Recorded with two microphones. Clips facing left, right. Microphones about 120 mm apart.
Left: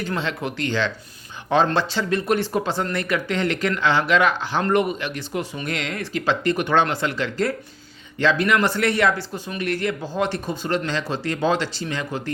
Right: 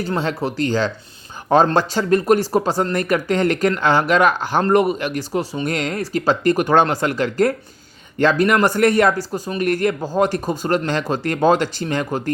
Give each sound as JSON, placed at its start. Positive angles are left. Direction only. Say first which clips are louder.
{"t": 0.0, "sound": "speech", "louder": "right 4 dB", "side_deg": -40}